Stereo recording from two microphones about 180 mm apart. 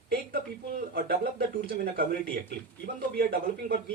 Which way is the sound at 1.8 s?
55° right (ahead or behind).